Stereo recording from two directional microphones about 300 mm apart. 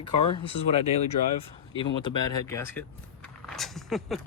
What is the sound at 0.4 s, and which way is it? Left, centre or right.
Speech, centre.